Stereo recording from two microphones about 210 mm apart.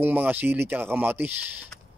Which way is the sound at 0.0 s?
10° right (ahead or behind).